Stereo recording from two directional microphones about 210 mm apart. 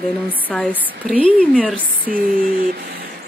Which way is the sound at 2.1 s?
50° right (ahead or behind).